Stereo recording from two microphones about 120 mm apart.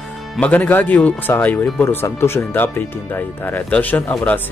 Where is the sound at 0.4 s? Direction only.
15° left (ahead or behind).